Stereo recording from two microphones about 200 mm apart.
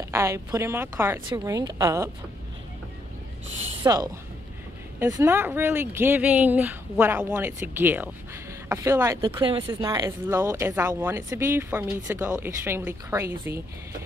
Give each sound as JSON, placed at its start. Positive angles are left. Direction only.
{"t": 0.0, "sound": "speech", "side_deg": -15}
{"t": 3.8, "sound": "speech", "side_deg": -20}